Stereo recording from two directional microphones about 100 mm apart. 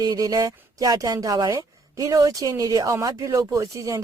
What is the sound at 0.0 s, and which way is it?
A woman's voice, 40° right (ahead or behind).